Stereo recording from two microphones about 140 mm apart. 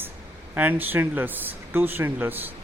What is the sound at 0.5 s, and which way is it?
Speech, 10° right (ahead or behind).